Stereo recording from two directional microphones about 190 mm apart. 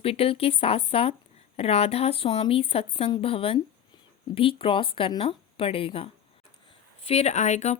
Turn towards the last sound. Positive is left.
turn(degrees=40)  # may be behind; listen again after turning